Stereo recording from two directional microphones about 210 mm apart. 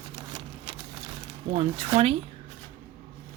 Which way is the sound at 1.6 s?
30° right (ahead or behind).